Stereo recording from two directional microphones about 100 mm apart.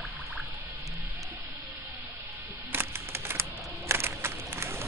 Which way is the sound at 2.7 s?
25° right (ahead or behind).